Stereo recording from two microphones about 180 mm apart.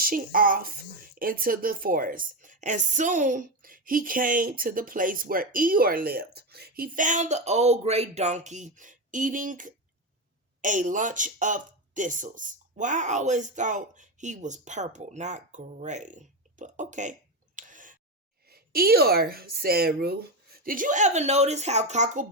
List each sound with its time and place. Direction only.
0.0 s speech: 50° right (ahead or behind)
18.4 s a woman's voice: 55° right (ahead or behind); by 22.3 s 40° right (ahead or behind)